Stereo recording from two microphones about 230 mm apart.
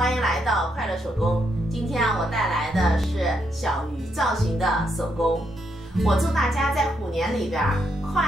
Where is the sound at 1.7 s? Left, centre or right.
Centre.